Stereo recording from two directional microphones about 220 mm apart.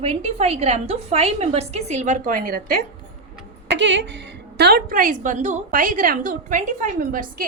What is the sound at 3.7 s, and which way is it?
Speech, 55° right (ahead or behind).